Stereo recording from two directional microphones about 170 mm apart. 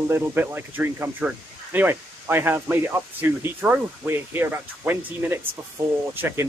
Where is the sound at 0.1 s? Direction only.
10° right (ahead or behind).